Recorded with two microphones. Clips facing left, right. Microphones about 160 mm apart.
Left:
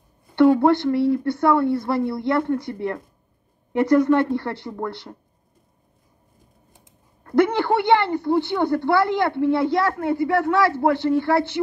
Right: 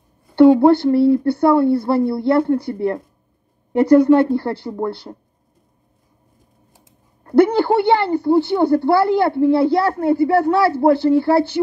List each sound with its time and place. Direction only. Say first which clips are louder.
0.4 s a woman's voice: right 5 dB; 30° right (ahead or behind)
7.2 s a woman's voice: right 5 dB; 35° right (ahead or behind)